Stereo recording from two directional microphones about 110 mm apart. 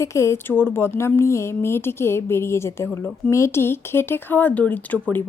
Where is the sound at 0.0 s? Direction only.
25° left (ahead or behind).